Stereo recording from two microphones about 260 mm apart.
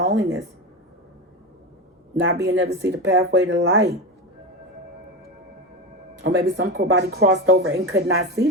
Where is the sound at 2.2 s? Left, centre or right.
Right.